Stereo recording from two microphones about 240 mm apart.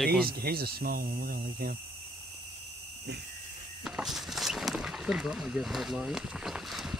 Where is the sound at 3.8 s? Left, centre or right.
Centre.